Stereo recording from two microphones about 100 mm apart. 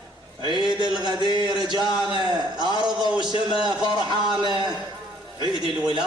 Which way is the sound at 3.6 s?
45° right (ahead or behind).